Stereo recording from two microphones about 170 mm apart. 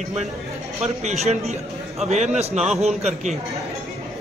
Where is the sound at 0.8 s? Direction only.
40° right (ahead or behind).